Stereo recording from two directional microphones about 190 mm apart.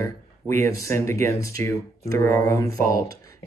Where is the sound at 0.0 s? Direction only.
15° left (ahead or behind).